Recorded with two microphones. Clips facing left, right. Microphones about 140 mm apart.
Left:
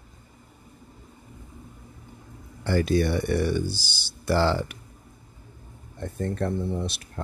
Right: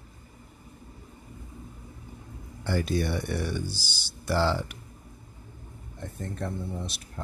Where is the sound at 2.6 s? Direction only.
70° left (ahead or behind).